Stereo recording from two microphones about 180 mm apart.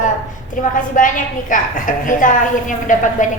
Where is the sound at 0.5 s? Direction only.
45° left (ahead or behind).